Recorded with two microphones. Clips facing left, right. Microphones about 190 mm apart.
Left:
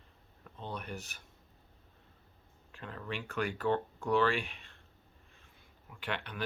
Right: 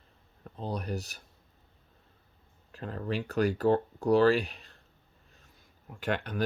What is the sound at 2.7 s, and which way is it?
Speech, 40° right (ahead or behind).